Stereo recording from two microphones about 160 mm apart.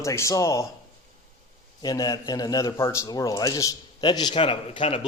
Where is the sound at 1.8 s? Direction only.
25° left (ahead or behind).